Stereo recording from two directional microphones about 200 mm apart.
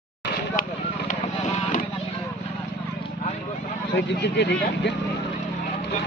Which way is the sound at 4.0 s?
60° left (ahead or behind).